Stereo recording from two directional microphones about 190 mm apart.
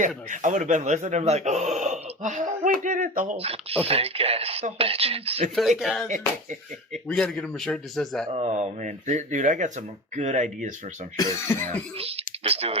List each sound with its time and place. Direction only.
0.3 s speech: 40° right (ahead or behind)
5.5 s speech: centre (ahead or behind)
6.1 s speech: 40° right (ahead or behind)
6.9 s speech: 5° left (ahead or behind)
8.3 s speech: 35° right (ahead or behind)
11.2 s cough: 15° left (ahead or behind)
11.9 s speech: 30° right (ahead or behind)